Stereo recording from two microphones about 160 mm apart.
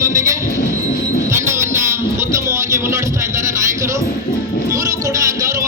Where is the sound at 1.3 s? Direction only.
15° right (ahead or behind).